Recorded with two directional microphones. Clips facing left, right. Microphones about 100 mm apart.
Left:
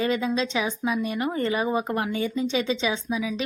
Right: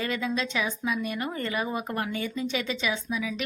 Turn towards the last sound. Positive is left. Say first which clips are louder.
# left 3 dB
turn(degrees=25)  # may be behind; listen again after turning